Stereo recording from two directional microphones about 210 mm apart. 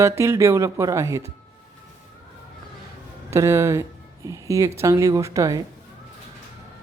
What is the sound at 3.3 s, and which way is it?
Speech, 15° right (ahead or behind).